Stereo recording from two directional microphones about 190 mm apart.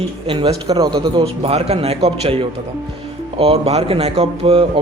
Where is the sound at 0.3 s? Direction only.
25° right (ahead or behind).